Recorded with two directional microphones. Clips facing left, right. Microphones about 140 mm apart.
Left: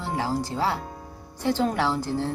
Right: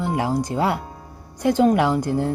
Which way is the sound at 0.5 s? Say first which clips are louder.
Right 4 dB; 55° right (ahead or behind).